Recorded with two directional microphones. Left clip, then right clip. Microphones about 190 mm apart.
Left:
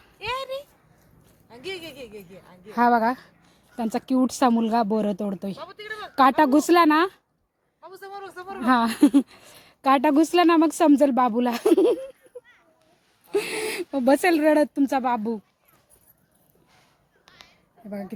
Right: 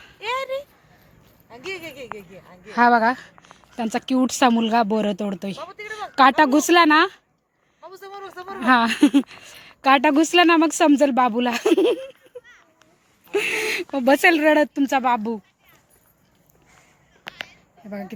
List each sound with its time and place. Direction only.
0.2 s a sound: 55° left (ahead or behind)
2.6 s speech: 5° left (ahead or behind)
7.8 s speech: 25° left (ahead or behind)
13.3 s speech: 10° left (ahead or behind)
17.8 s speech: centre (ahead or behind)